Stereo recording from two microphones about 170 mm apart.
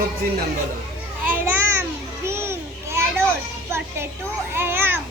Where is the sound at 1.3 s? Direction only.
10° right (ahead or behind).